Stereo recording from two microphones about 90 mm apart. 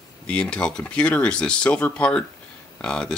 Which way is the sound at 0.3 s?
10° left (ahead or behind).